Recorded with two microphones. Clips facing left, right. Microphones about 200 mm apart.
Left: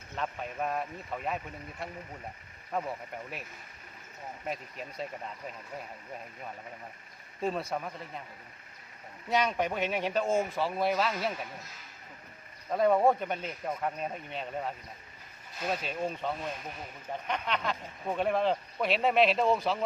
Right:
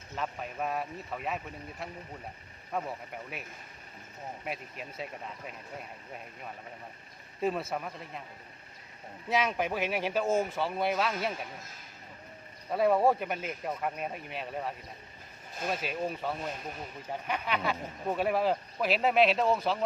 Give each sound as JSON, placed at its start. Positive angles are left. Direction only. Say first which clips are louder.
{"t": 0.2, "sound": "speech", "louder": "left 1 dB", "side_deg": 0}
{"t": 4.4, "sound": "speech", "louder": "left 3 dB", "side_deg": -5}
{"t": 7.4, "sound": "speech", "louder": "right 1 dB", "side_deg": 0}
{"t": 9.3, "sound": "speech", "louder": "left 1 dB", "side_deg": 0}
{"t": 12.7, "sound": "speech", "louder": "left 1 dB", "side_deg": -5}
{"t": 15.8, "sound": "speech", "louder": "even", "side_deg": -5}